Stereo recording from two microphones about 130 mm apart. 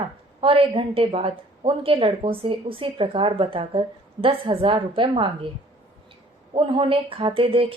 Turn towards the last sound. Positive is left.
turn(degrees=-45)  # may be behind; listen again after turning